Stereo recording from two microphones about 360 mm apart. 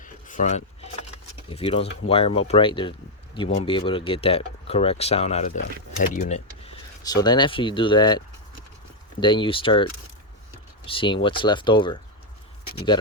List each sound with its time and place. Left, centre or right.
0.0 s a sound: left
1.5 s speech: centre
9.2 s speech: centre
10.8 s speech: centre